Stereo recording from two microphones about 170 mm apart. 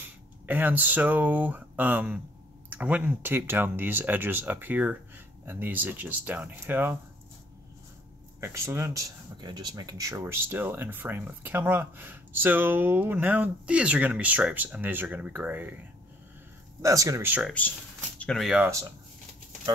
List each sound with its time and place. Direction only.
0.5 s speech: 10° right (ahead or behind)
8.4 s speech: 15° right (ahead or behind)
16.8 s speech: 20° right (ahead or behind)
17.5 s speech: 10° left (ahead or behind)
18.7 s speech: 20° right (ahead or behind)